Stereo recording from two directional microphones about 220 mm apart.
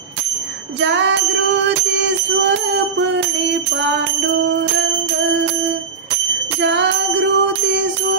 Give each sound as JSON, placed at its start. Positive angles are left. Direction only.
{"t": 0.7, "sound": "bicycle bell", "side_deg": -55}
{"t": 6.6, "sound": "music", "side_deg": -55}